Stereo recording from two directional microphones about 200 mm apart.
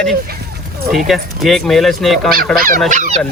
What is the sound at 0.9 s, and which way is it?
Speech, centre (ahead or behind).